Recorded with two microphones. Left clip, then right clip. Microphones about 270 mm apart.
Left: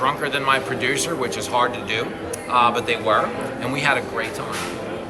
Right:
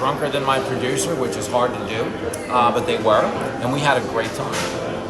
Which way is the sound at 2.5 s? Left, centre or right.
Centre.